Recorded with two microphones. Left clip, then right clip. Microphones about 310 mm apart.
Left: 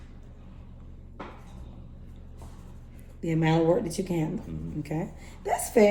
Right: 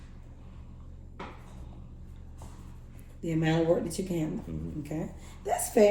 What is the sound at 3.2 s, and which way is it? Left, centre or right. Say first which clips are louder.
A woman's voice: left 3 dB; left.